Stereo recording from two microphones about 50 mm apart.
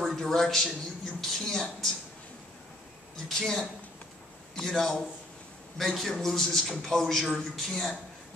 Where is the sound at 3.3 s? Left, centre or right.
Centre.